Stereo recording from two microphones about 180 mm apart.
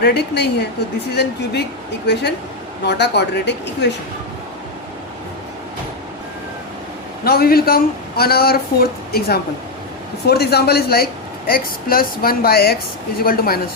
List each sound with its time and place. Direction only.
0.0 s speech: 70° left (ahead or behind)
2.8 s speech: 70° left (ahead or behind)
7.3 s a woman's voice: 55° left (ahead or behind)